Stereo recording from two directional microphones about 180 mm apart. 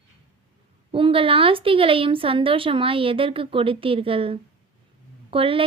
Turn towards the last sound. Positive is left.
turn(degrees=-30)  # may be behind; listen again after turning